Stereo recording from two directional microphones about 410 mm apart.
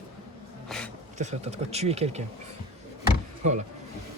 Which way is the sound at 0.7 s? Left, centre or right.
Centre.